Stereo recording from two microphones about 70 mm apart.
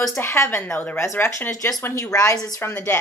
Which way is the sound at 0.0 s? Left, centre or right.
Left.